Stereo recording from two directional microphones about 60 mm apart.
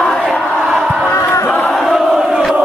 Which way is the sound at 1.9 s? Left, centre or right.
Centre.